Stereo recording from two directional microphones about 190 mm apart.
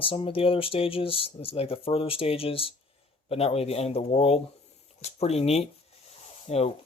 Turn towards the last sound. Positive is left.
turn(degrees=35)  # may be behind; listen again after turning